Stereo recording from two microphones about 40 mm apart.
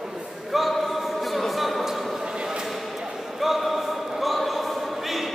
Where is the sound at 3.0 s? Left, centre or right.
Centre.